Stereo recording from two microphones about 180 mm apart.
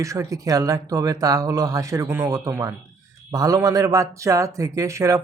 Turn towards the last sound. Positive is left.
turn(degrees=-15)  # may be behind; listen again after turning